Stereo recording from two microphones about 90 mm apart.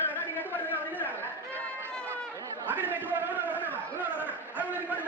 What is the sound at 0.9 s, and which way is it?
Chatter, 20° left (ahead or behind).